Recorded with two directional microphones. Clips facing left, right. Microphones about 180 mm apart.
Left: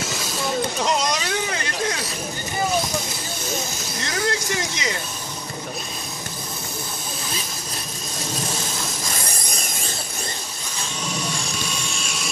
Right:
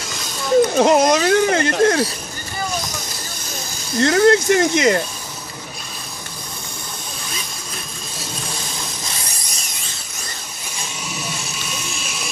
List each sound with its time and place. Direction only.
0.7 s speech: 55° right (ahead or behind)
4.0 s speech: 60° right (ahead or behind)
11.1 s a sound: 5° right (ahead or behind)